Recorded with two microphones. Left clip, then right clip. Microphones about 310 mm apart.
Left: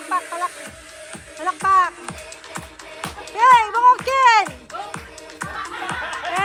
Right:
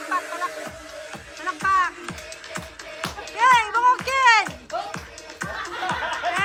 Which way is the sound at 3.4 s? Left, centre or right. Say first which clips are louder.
Left 4 dB; centre.